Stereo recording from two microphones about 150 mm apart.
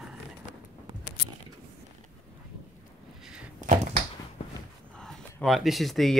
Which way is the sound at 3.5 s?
55° right (ahead or behind).